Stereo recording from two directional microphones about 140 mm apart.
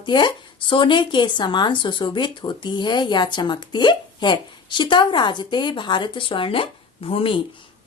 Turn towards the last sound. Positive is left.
turn(degrees=40)  # may be behind; listen again after turning